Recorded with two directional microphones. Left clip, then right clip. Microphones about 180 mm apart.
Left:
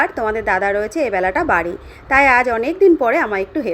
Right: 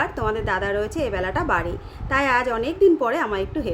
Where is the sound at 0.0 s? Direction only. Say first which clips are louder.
Left 6 dB; 20° left (ahead or behind).